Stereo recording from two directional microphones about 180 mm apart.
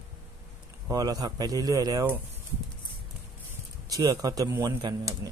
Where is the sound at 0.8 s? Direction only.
20° right (ahead or behind).